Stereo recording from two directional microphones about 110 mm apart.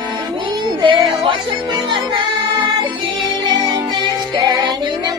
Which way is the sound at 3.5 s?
45° right (ahead or behind).